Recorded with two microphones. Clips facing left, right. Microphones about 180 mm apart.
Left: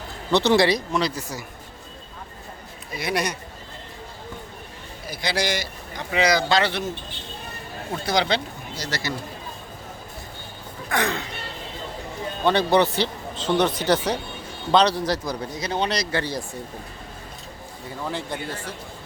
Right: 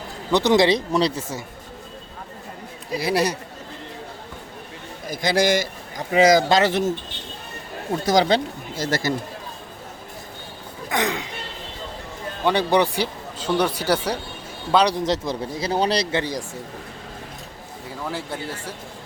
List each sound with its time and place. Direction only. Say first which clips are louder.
0.3 s a man's voice: right 1 dB; 15° right (ahead or behind)
3.0 s speech: right 4 dB; 30° right (ahead or behind)
5.0 s a man's voice: right 6 dB; 45° right (ahead or behind)
8.0 s a man's voice: right 5 dB; 40° right (ahead or behind)
10.8 s speech: right 1 dB; 20° right (ahead or behind)
12.5 s a man's voice: even; 10° right (ahead or behind); by 16.0 s 35° right (ahead or behind)
16.1 s speech: right 2 dB; 15° right (ahead or behind)
18.0 s speech: even; 5° right (ahead or behind)